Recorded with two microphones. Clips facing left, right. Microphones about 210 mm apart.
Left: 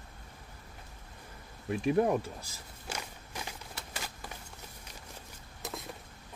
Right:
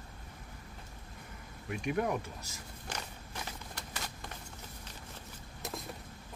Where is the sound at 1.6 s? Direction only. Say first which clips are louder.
Left 6 dB; 30° left (ahead or behind).